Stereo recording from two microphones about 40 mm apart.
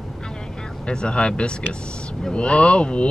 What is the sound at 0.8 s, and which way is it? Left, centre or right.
Speech, left.